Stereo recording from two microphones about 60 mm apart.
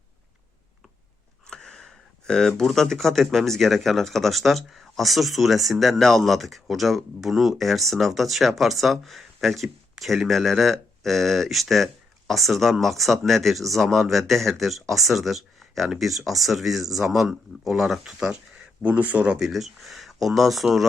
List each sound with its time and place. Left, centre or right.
1.5 s speech: centre
18.8 s speech: right
19.4 s speech: centre